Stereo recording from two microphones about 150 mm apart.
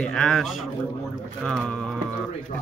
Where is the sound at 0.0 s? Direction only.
5° left (ahead or behind).